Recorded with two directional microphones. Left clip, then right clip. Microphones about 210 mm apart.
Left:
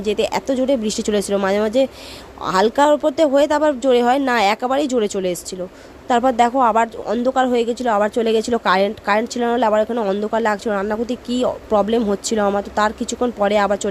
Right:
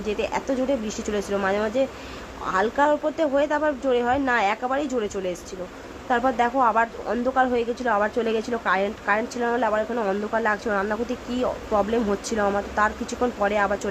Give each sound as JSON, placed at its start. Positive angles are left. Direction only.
{"t": 0.0, "sound": "speech", "side_deg": 40}